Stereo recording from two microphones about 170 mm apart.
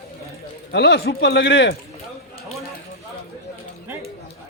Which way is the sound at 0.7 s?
85° left.